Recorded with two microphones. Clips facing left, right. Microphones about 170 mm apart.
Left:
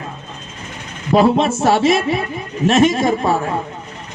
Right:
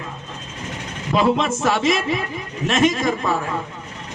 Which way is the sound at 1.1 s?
35° left (ahead or behind).